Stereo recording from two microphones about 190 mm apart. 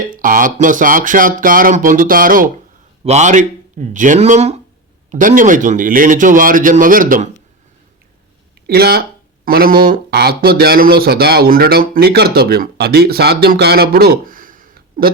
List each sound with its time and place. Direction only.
0.1 s speech: 45° right (ahead or behind)
8.6 s speech: 55° right (ahead or behind)